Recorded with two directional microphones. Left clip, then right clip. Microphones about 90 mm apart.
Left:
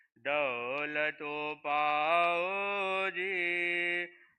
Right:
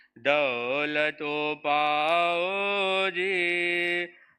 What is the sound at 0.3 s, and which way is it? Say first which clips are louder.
Mantra: right 7 dB; 20° right (ahead or behind).